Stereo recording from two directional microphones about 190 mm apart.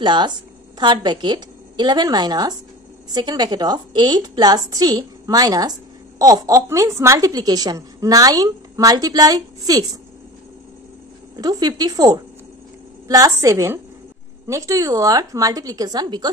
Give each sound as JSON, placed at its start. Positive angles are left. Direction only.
{"t": 0.0, "sound": "a woman's voice", "side_deg": -25}
{"t": 11.3, "sound": "a woman's voice", "side_deg": -20}